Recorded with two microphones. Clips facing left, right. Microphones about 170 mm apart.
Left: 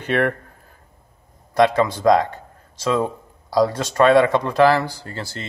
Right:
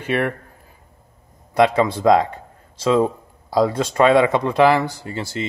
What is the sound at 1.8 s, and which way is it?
Speech, 25° right (ahead or behind).